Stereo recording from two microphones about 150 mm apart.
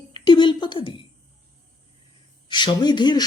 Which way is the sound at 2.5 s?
30° left (ahead or behind).